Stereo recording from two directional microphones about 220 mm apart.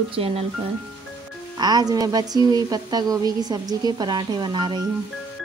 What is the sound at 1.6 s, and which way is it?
A woman's voice, 20° right (ahead or behind).